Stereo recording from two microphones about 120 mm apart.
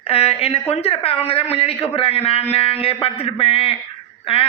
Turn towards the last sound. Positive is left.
turn(degrees=50)  # may be behind; listen again after turning